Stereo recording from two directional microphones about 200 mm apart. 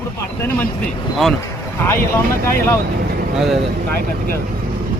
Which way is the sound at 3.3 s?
Centre (ahead or behind).